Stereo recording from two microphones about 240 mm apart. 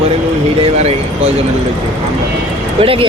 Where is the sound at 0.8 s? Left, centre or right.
Right.